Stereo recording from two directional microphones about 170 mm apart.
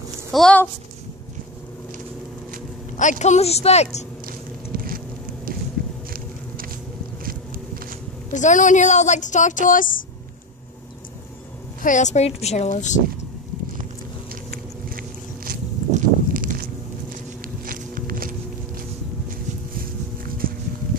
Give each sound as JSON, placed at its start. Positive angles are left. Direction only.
{"t": 0.3, "sound": "speech", "side_deg": 5}
{"t": 3.0, "sound": "a woman's voice", "side_deg": 45}
{"t": 4.7, "sound": "a sound", "side_deg": -60}
{"t": 7.2, "sound": "vehicle", "side_deg": -60}
{"t": 8.3, "sound": "speech", "side_deg": 45}
{"t": 11.8, "sound": "speech", "side_deg": 45}
{"t": 14.3, "sound": "boat", "side_deg": -60}
{"t": 17.6, "sound": "walk", "side_deg": -55}
{"t": 19.8, "sound": "a sound", "side_deg": -60}